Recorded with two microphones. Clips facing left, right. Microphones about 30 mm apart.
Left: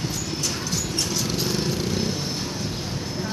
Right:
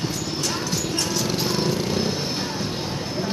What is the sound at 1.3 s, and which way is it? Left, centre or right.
Jackhammer, centre.